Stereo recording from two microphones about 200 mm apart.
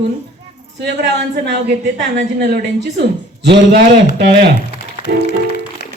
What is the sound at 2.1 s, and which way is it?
Speech, 55° right (ahead or behind).